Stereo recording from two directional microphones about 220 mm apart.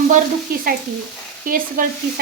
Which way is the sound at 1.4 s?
40° right (ahead or behind).